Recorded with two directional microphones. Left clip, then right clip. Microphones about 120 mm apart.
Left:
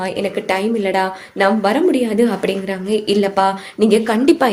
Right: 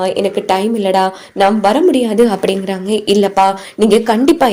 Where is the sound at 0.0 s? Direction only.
40° right (ahead or behind).